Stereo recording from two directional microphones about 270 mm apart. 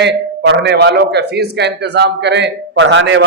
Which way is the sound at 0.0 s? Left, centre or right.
Right.